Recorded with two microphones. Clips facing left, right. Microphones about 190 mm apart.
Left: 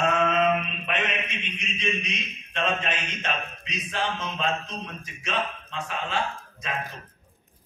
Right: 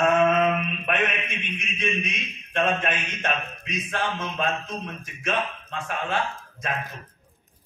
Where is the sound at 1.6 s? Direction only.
55° right (ahead or behind).